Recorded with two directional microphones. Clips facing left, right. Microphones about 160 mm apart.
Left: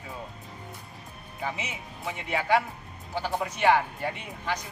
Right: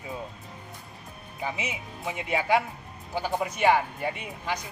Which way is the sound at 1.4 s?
15° right (ahead or behind).